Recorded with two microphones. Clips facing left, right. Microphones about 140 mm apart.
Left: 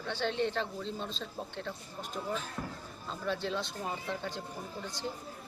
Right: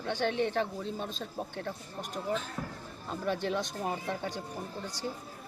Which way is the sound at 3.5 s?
15° right (ahead or behind).